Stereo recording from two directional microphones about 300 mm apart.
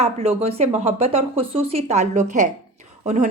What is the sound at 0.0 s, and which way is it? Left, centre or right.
A woman's voice, right.